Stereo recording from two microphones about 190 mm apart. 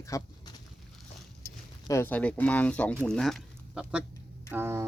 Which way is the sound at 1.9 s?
10° left (ahead or behind).